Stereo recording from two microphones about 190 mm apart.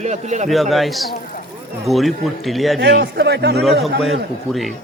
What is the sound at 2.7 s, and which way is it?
Speech, 60° right (ahead or behind).